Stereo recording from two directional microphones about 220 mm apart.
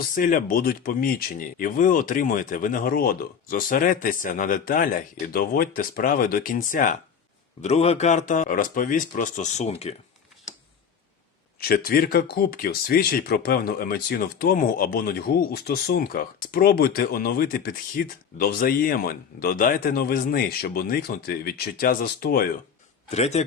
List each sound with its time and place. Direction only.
0.1 s speech: 40° left (ahead or behind)
11.7 s speech: 40° left (ahead or behind)
23.0 s speech: 30° left (ahead or behind)